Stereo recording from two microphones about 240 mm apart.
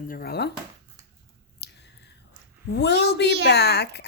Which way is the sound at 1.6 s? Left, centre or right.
Left.